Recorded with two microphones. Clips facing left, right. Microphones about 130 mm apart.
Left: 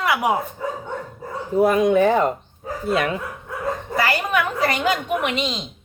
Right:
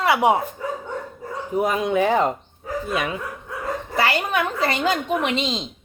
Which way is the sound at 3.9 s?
30° right (ahead or behind).